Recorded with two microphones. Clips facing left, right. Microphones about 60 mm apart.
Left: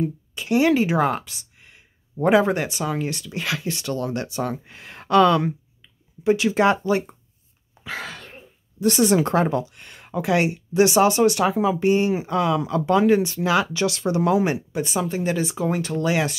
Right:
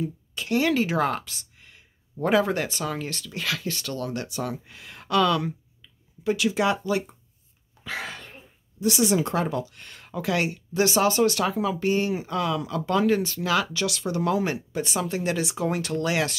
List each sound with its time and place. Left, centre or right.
0.3 s speech: centre; by 7.2 s left
8.0 s cough: centre
8.8 s speech: left
9.3 s speech: left
9.7 s speech: centre